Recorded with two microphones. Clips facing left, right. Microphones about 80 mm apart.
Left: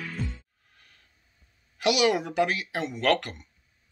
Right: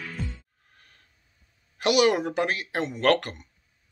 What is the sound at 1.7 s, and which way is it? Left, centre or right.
Speech, right.